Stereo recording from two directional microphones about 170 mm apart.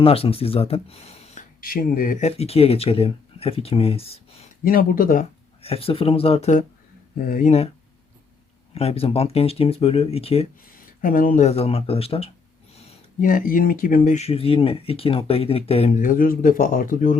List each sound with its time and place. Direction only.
0.0 s speech: 35° left (ahead or behind)
1.6 s speech: 55° left (ahead or behind); by 4.2 s 35° left (ahead or behind)
4.6 s speech: 60° left (ahead or behind)
5.6 s speech: 35° left (ahead or behind)
7.3 s speech: 50° left (ahead or behind)
8.7 s speech: 35° left (ahead or behind)
10.8 s a sound: 55° left (ahead or behind)
11.4 s speech: 35° left (ahead or behind)
13.2 s speech: 55° left (ahead or behind)
14.2 s speech: 35° left (ahead or behind)
16.0 s speech: 55° left (ahead or behind)